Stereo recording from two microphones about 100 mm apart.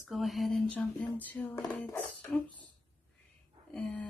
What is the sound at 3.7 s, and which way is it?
Speech, 10° left (ahead or behind).